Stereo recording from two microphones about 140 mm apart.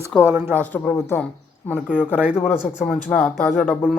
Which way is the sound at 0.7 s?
15° left (ahead or behind).